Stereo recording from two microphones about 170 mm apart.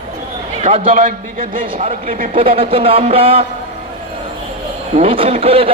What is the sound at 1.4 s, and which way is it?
A man's voice, 40° right (ahead or behind).